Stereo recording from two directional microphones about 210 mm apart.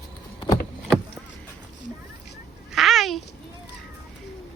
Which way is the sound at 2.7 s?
Centre (ahead or behind).